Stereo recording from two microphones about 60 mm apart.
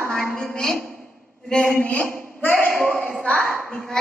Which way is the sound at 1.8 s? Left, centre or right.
Left.